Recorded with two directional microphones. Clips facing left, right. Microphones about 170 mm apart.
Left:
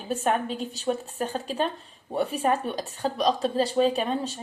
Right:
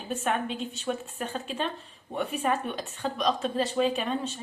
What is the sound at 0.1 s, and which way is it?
Speech, 40° left (ahead or behind).